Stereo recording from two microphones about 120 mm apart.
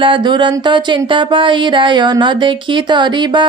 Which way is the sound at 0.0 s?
40° right (ahead or behind).